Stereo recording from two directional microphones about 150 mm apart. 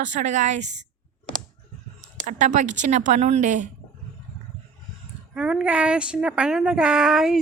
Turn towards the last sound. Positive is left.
turn(degrees=-5)  # may be behind; listen again after turning